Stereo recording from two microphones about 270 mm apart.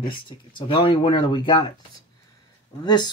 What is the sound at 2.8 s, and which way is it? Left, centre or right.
Speech, centre.